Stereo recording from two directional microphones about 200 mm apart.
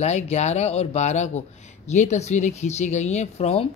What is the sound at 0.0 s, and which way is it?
Speech, 35° left (ahead or behind).